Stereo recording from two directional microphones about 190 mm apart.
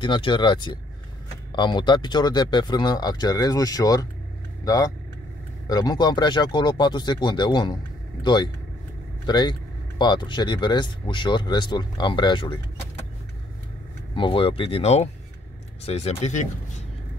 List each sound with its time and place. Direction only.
0.0 s speech: 25° left (ahead or behind)
14.1 s speech: 25° left (ahead or behind)